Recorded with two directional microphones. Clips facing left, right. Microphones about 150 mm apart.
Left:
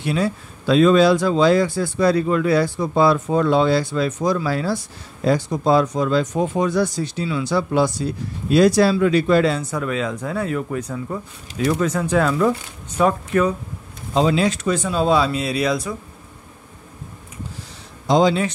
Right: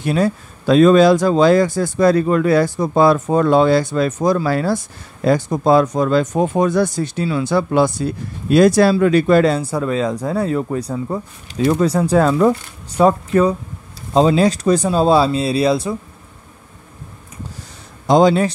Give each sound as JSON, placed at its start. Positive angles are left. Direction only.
{"t": 0.0, "sound": "speech", "side_deg": -45}
{"t": 9.6, "sound": "speech", "side_deg": -30}
{"t": 18.0, "sound": "speech", "side_deg": -50}